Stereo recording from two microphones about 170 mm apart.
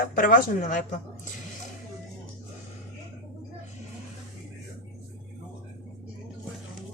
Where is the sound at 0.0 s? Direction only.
50° left (ahead or behind).